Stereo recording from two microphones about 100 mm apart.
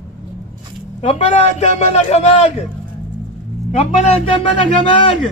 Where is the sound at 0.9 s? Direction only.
90° left.